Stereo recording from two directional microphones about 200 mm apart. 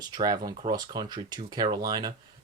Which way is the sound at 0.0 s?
20° right (ahead or behind).